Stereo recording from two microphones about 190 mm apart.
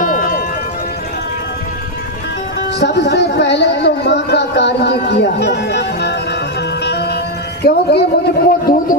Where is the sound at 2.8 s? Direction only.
65° left (ahead or behind).